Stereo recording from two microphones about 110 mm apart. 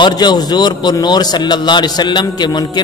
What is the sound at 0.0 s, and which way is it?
A man's voice, 40° left (ahead or behind).